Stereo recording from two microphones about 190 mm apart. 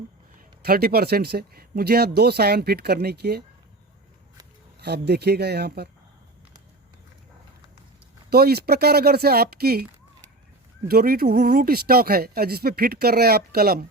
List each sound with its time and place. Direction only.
0.6 s speech: 55° right (ahead or behind)
4.8 s speech: 60° right (ahead or behind)
8.3 s speech: 55° right (ahead or behind)
10.8 s speech: 50° right (ahead or behind)